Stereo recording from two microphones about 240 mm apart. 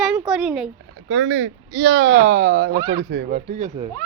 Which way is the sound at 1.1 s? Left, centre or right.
Right.